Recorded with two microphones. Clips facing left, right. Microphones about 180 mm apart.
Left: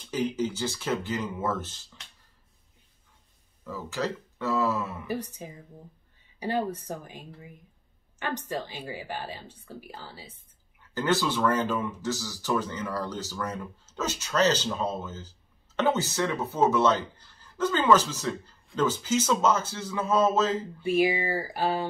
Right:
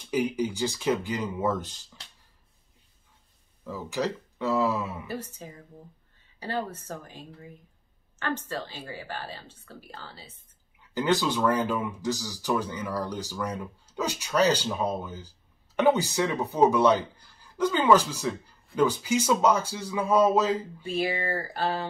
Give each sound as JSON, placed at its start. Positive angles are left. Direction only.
{"t": 0.1, "sound": "speech", "side_deg": -10}
{"t": 3.6, "sound": "speech", "side_deg": -15}
{"t": 5.0, "sound": "speech", "side_deg": 15}
{"t": 11.0, "sound": "speech", "side_deg": -15}
{"t": 20.8, "sound": "speech", "side_deg": 15}